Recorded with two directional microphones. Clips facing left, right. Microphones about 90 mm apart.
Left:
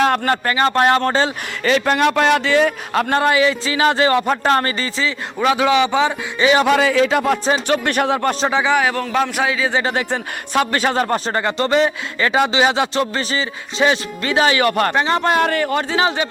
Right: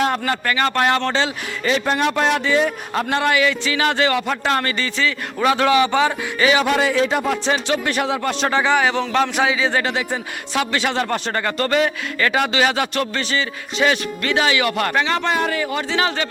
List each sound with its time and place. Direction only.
0.4 s speech: 30° left (ahead or behind)
1.6 s a man's voice: 70° left (ahead or behind)
3.2 s speech: 25° left (ahead or behind)
5.4 s speech: 5° left (ahead or behind)
6.7 s a man's voice: 90° left
7.7 s speech: 55° left (ahead or behind)
8.4 s speech: 10° left (ahead or behind)
9.9 s speech: 50° left (ahead or behind)
15.3 s speech: 55° left (ahead or behind)
16.0 s speech: 20° left (ahead or behind)